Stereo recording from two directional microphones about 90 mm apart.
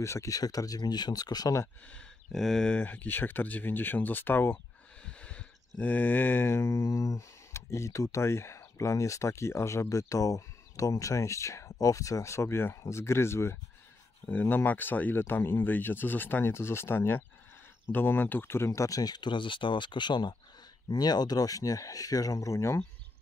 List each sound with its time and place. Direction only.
0.0 s speech: 35° left (ahead or behind)
1.9 s speech: 5° left (ahead or behind); by 4.6 s 25° left (ahead or behind)
5.0 s a sound: 10° left (ahead or behind); by 13.6 s 30° left (ahead or behind)
14.2 s speech: 20° left (ahead or behind)
18.7 s speech: 40° left (ahead or behind)